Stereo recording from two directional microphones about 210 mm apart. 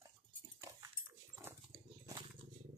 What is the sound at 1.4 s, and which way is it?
Dog, 15° right (ahead or behind).